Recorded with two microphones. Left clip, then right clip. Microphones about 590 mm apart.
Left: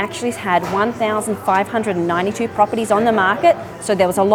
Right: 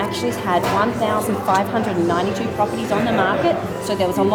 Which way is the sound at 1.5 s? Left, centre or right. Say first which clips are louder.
Left 2 dB; left.